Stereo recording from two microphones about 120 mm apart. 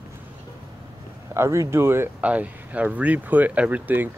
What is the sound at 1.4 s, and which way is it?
Speech, 25° right (ahead or behind).